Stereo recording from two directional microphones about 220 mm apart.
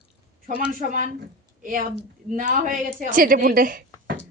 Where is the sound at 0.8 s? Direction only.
35° right (ahead or behind).